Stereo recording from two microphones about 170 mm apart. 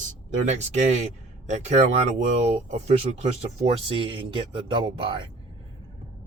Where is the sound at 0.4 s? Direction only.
40° right (ahead or behind).